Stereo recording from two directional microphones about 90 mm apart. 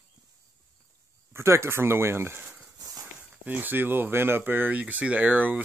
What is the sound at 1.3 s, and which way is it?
Speech, 30° right (ahead or behind).